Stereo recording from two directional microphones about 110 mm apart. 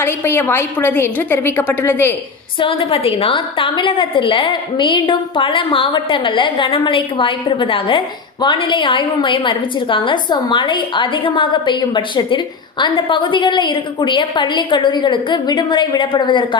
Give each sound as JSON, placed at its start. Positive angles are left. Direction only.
{"t": 0.0, "sound": "a woman's voice", "side_deg": 20}
{"t": 2.6, "sound": "a woman's voice", "side_deg": 55}